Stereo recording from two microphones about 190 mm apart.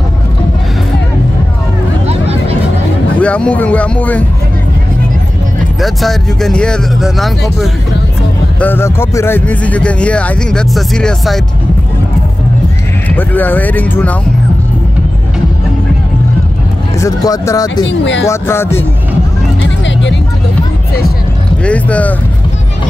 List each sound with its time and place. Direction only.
2.0 s a sound: 30° right (ahead or behind)
3.2 s speech: 5° left (ahead or behind)
5.8 s speech: centre (ahead or behind)
8.5 s speech: 10° left (ahead or behind)
13.1 s speech: 10° left (ahead or behind)
17.0 s speech: 15° left (ahead or behind)
17.8 s speech: 70° left (ahead or behind)
18.3 s speech: 15° left (ahead or behind)
21.6 s speech: 5° left (ahead or behind)